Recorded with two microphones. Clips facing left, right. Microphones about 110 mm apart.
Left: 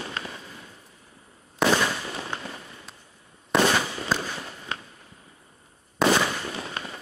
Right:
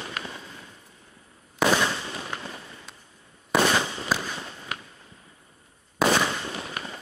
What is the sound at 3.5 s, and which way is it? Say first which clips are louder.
Fireworks: left 1 dB; 5° right (ahead or behind).